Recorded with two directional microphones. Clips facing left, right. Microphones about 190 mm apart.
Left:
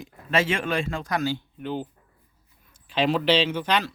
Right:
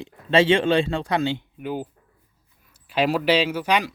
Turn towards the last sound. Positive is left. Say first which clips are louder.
# right 2 dB
turn(degrees=-10)  # may be behind; listen again after turning